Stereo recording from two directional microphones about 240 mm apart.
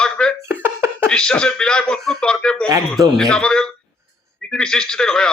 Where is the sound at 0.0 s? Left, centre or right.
Centre.